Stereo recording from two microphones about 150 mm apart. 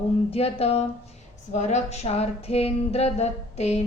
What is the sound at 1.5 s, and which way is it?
Speech, 50° left (ahead or behind).